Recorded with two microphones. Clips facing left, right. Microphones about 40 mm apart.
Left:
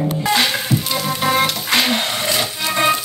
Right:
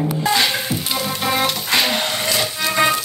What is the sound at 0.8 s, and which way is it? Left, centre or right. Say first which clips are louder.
Frying: left 2 dB; centre.